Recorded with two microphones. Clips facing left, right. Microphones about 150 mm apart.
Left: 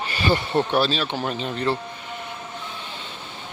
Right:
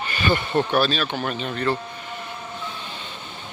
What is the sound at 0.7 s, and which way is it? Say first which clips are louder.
Speech: even; 25° left (ahead or behind).